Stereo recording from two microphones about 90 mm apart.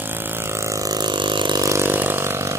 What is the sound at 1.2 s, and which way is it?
Vehicle, 60° right (ahead or behind).